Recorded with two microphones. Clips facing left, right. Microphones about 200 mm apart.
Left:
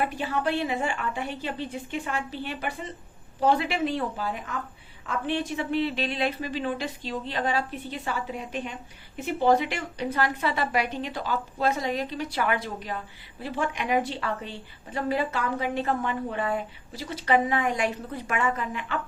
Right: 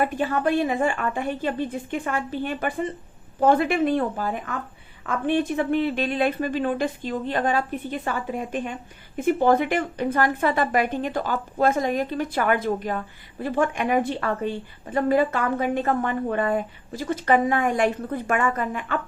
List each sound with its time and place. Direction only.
0.1 s a woman's voice: 55° right (ahead or behind)